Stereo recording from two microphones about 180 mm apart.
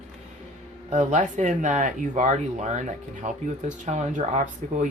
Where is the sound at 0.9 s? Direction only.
45° right (ahead or behind).